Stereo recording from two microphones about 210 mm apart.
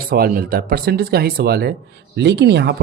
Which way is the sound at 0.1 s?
45° right (ahead or behind).